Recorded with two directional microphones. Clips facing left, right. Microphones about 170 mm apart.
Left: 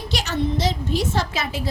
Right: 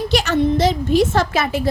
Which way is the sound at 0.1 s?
55° right (ahead or behind).